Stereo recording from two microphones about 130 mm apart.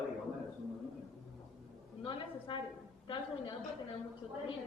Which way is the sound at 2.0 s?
40° left (ahead or behind).